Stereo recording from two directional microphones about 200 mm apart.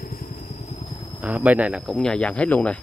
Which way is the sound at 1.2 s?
5° right (ahead or behind).